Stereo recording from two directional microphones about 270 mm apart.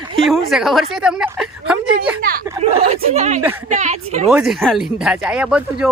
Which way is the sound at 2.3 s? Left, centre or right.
Right.